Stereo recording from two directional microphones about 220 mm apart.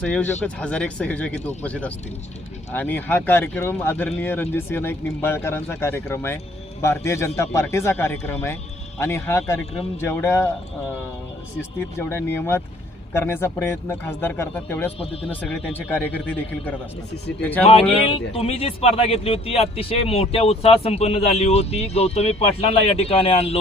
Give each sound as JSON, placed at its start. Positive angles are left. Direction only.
{"t": 0.0, "sound": "speech", "side_deg": 5}
{"t": 11.9, "sound": "speech", "side_deg": 10}
{"t": 14.9, "sound": "speech", "side_deg": 25}
{"t": 15.3, "sound": "speech", "side_deg": 5}
{"t": 18.3, "sound": "speech", "side_deg": 25}